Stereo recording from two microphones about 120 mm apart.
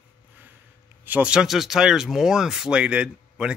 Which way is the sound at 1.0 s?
15° right (ahead or behind).